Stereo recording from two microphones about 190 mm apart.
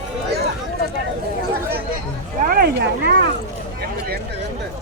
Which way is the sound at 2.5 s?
50° right (ahead or behind).